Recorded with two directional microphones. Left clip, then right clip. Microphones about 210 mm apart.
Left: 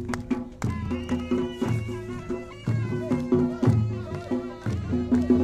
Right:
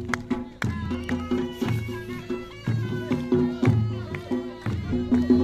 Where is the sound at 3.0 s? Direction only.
40° right (ahead or behind).